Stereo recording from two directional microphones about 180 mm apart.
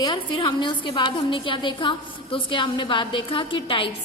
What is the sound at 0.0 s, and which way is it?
A woman's voice, 25° left (ahead or behind).